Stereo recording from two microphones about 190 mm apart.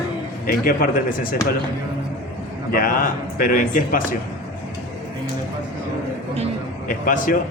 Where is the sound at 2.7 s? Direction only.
50° left (ahead or behind).